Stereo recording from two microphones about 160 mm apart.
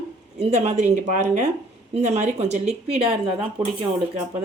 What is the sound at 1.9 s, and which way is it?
Speech, 45° right (ahead or behind).